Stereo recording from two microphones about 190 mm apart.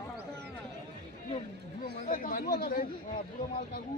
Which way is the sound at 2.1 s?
45° left (ahead or behind).